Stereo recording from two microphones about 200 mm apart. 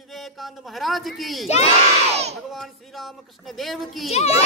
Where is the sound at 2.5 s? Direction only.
Centre (ahead or behind).